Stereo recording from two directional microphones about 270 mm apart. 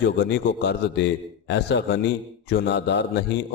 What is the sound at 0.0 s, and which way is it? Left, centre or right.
A man's voice, left.